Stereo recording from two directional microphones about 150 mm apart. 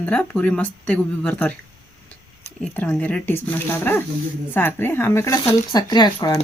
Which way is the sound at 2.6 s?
10° left (ahead or behind).